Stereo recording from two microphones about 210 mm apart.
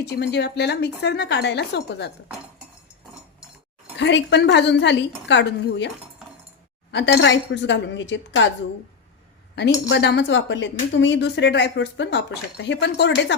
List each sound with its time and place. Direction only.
0.0 s speech: 55° left (ahead or behind)
3.9 s a woman's voice: 60° left (ahead or behind)
6.9 s a woman's voice: 55° left (ahead or behind)
9.6 s a woman's voice: 55° left (ahead or behind)